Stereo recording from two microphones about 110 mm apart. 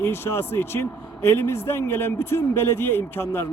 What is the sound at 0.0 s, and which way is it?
A man's voice, 20° left (ahead or behind).